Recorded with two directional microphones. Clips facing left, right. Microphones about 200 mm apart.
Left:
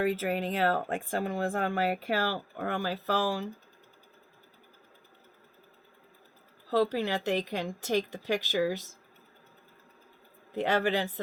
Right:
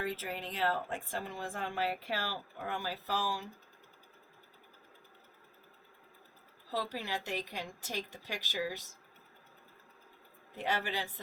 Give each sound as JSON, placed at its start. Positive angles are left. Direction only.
{"t": 0.0, "sound": "speech", "side_deg": 65}
{"t": 6.7, "sound": "a woman's voice", "side_deg": 65}
{"t": 10.6, "sound": "a woman's voice", "side_deg": 70}